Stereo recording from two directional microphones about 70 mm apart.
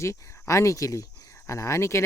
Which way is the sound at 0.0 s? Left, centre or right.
Left.